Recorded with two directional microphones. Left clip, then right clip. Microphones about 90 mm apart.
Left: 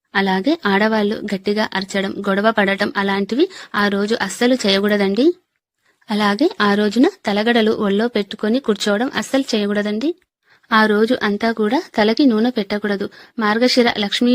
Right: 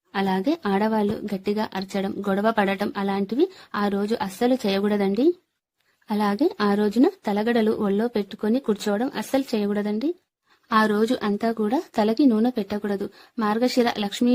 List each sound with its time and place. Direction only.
0.1 s speech: 45° left (ahead or behind); by 14.3 s 30° left (ahead or behind)